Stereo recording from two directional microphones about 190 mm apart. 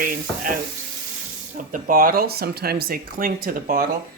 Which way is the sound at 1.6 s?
45° right (ahead or behind).